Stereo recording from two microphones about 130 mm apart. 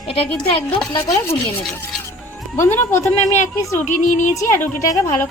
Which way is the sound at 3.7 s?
70° left (ahead or behind).